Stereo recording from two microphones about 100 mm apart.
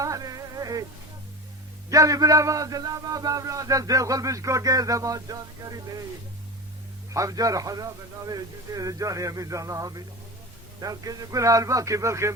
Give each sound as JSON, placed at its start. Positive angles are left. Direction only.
{"t": 0.0, "sound": "music", "side_deg": -35}
{"t": 1.9, "sound": "a man's voice", "side_deg": -35}
{"t": 7.1, "sound": "a man's voice", "side_deg": -35}